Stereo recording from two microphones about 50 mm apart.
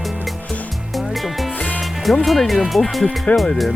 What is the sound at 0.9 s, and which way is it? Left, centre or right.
Music, centre.